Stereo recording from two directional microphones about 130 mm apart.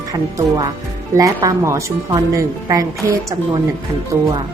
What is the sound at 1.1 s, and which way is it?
Speech, 25° right (ahead or behind).